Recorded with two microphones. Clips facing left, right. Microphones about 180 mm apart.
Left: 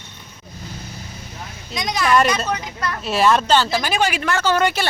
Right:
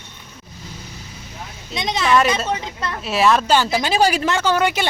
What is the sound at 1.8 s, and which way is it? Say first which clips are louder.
Speech: even; 25° right (ahead or behind).